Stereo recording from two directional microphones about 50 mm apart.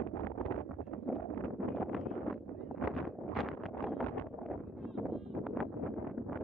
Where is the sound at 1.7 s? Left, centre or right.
Centre.